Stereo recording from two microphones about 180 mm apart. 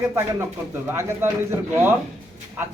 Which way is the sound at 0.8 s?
15° right (ahead or behind).